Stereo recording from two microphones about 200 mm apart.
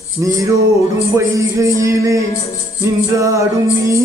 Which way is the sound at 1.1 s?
15° right (ahead or behind).